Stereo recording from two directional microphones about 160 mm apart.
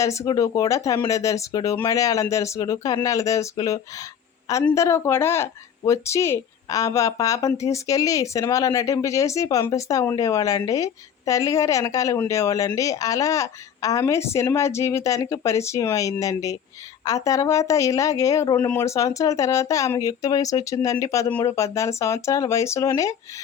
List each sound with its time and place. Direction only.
0.0 s speech: 20° left (ahead or behind)